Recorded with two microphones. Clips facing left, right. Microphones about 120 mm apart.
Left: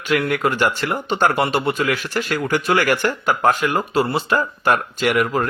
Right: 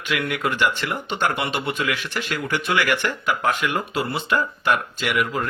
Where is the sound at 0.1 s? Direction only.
40° left (ahead or behind).